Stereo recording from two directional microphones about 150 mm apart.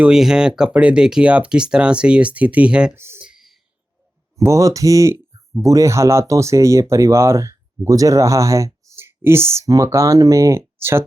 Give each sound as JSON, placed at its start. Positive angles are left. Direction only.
{"t": 0.0, "sound": "speech", "side_deg": -5}
{"t": 3.2, "sound": "whispering", "side_deg": 0}
{"t": 4.4, "sound": "speech", "side_deg": -20}